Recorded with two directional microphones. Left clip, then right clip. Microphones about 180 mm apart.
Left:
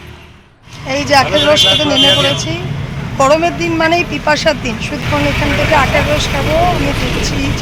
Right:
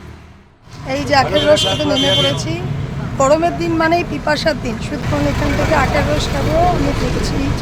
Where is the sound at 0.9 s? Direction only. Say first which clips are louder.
Left 3 dB; 10° left (ahead or behind).